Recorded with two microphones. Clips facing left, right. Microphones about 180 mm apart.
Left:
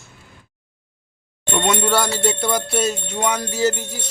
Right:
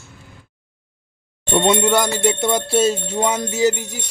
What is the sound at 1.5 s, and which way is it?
Bell, 25° right (ahead or behind).